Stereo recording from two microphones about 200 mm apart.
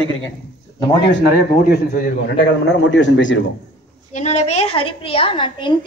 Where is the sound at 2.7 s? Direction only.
65° left (ahead or behind).